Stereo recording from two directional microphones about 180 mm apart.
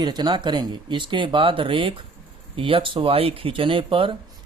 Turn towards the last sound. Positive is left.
turn(degrees=-30)  # may be behind; listen again after turning